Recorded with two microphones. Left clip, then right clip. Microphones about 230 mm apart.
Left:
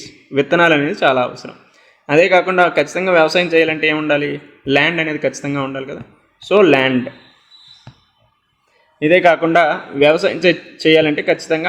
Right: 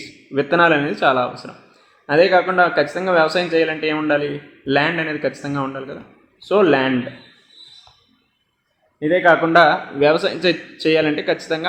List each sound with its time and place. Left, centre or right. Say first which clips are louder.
0.3 s a man's voice: left 2 dB; left
9.0 s a man's voice: left 3 dB; left